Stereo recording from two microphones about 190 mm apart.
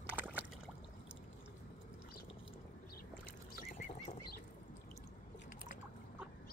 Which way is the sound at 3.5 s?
50° left (ahead or behind).